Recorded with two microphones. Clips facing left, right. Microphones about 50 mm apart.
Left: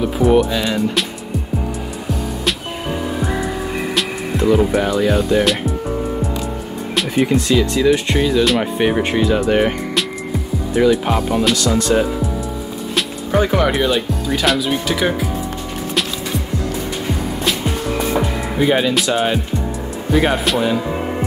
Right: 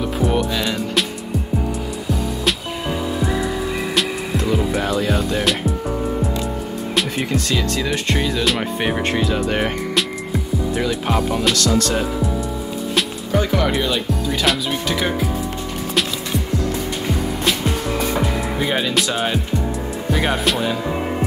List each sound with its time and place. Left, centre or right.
0.0 s music: centre
4.5 s speech: centre
5.9 s music: centre
7.5 s speech: centre
11.5 s speech: centre
13.3 s speech: centre
13.7 s speech: centre
17.5 s music: centre
17.9 s music: centre
18.2 s speech: centre